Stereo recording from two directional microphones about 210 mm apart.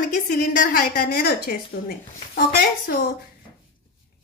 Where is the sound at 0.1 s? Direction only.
40° left (ahead or behind).